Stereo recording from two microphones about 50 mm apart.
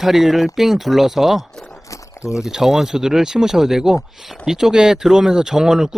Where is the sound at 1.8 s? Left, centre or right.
Left.